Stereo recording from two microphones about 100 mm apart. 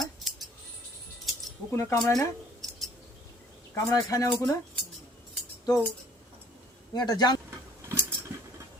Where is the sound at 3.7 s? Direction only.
35° left (ahead or behind).